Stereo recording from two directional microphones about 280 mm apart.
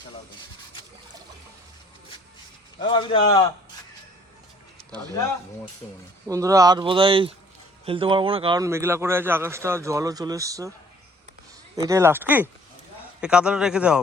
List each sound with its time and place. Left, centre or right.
2.8 s a man's voice: centre
6.2 s speech: centre
11.9 s speech: centre